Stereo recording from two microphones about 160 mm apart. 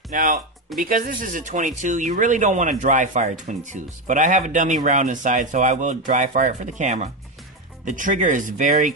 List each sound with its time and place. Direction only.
0.1 s speech: 55° right (ahead or behind)